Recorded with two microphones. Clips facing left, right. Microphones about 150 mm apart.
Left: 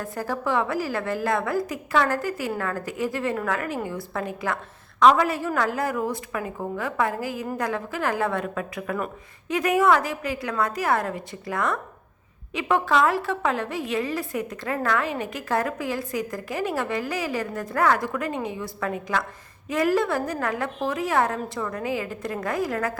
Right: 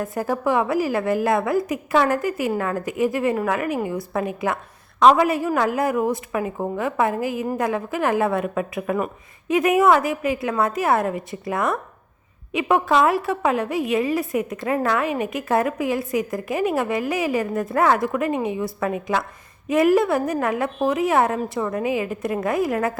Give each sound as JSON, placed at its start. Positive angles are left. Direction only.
{"t": 0.0, "sound": "a woman's voice", "side_deg": -20}